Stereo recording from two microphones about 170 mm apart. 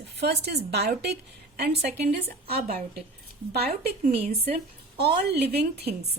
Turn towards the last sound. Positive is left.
turn(degrees=-70)  # may be behind; listen again after turning